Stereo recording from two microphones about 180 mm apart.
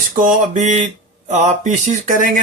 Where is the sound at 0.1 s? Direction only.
45° right (ahead or behind).